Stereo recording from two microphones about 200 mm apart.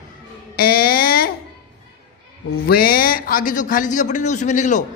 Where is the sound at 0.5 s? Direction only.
50° left (ahead or behind).